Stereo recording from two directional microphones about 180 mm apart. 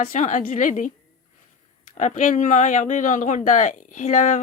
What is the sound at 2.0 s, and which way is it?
Speech, 40° left (ahead or behind).